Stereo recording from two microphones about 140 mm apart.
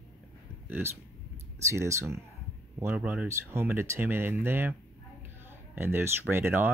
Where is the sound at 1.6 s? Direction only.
20° right (ahead or behind).